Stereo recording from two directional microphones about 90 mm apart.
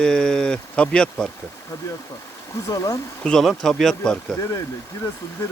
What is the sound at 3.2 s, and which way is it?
Speech, 5° left (ahead or behind).